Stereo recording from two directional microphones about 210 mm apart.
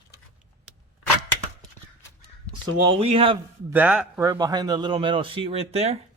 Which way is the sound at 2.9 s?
25° right (ahead or behind).